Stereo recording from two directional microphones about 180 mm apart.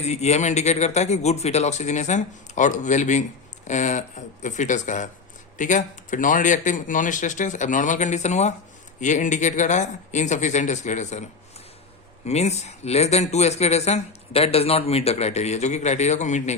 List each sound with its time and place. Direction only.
0.0 s a man's voice: 40° left (ahead or behind)